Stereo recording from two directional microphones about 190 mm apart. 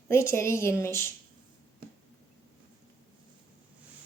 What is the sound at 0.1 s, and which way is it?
A woman's voice, 15° left (ahead or behind).